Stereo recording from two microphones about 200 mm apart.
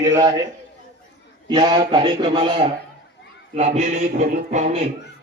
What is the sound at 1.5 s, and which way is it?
Speech, 20° right (ahead or behind).